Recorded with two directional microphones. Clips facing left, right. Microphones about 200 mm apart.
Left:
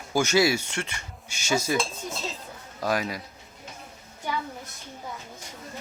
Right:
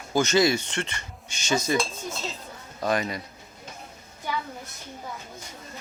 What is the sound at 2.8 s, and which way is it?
Speech, 5° left (ahead or behind).